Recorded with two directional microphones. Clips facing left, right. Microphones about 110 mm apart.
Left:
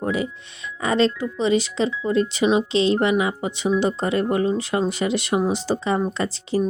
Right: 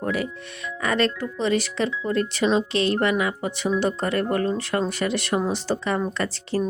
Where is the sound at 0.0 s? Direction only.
20° left (ahead or behind).